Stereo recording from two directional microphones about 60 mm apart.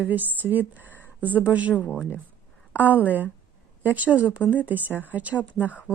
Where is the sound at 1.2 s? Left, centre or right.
Right.